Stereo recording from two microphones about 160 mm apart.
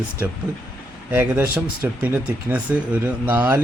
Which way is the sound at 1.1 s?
15° right (ahead or behind).